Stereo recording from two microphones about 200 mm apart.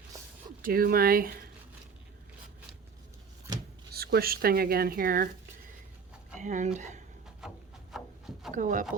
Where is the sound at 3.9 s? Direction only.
50° right (ahead or behind).